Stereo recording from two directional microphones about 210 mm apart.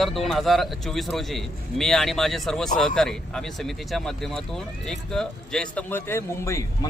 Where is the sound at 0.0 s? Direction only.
Centre (ahead or behind).